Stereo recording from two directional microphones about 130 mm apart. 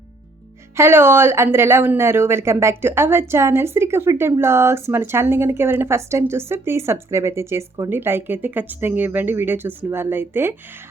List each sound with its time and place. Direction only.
0.8 s a woman's voice: 20° right (ahead or behind)